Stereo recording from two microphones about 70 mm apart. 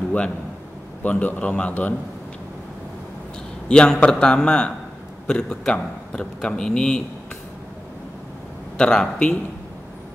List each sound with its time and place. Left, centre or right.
1.0 s a man's voice: left
3.6 s a man's voice: centre
8.7 s a man's voice: centre